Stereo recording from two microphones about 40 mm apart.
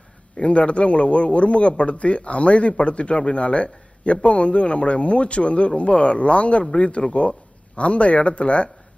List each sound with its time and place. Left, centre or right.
0.3 s speech: left